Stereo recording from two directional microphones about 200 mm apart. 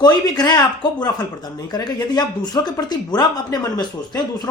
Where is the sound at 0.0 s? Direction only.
20° left (ahead or behind).